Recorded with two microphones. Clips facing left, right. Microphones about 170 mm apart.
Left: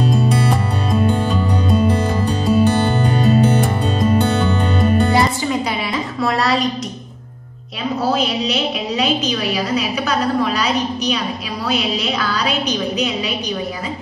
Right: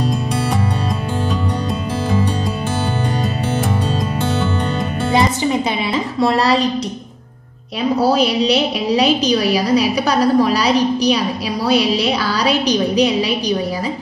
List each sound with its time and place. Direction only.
0.1 s music: centre (ahead or behind)
6.1 s a sound: 30° right (ahead or behind)
8.0 s a woman's voice: 35° right (ahead or behind)